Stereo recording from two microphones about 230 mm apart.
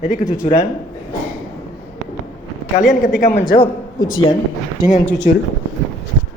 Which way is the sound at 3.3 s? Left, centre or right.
Left.